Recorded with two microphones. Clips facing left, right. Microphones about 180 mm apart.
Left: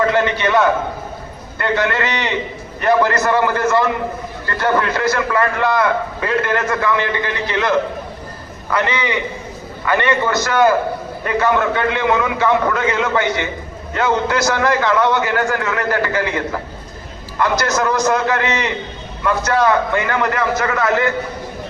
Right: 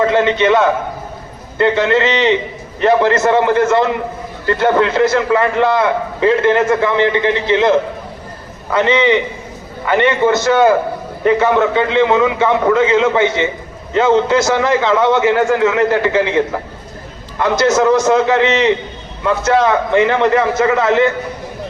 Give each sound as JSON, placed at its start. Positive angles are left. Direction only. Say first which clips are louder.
{"t": 0.1, "sound": "a man's voice", "louder": "right 4 dB", "side_deg": -20}